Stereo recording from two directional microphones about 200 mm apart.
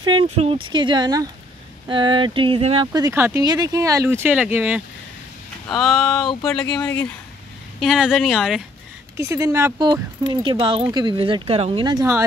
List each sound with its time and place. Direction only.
0.0 s speech: 25° right (ahead or behind); by 8.6 s centre (ahead or behind)
9.1 s speech: 15° right (ahead or behind)